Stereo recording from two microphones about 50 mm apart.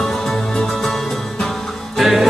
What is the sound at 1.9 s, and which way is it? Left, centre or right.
Music, centre.